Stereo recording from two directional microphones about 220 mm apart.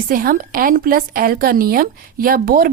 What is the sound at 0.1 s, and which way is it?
A woman's voice, 40° right (ahead or behind).